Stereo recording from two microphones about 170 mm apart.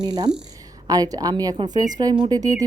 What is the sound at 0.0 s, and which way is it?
A woman's voice, 25° right (ahead or behind).